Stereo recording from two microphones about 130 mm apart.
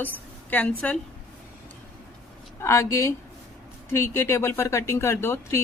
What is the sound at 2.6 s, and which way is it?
Speech, 20° left (ahead or behind).